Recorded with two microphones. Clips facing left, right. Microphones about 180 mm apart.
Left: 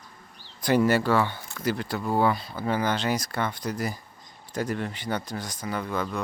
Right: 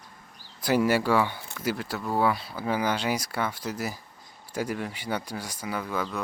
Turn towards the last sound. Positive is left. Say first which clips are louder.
# left 1 dB
turn(degrees=-5)  # may be behind; listen again after turning